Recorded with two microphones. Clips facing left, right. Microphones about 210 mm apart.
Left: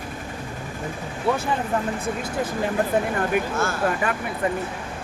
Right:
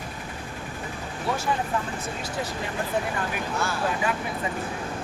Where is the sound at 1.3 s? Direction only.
55° left (ahead or behind).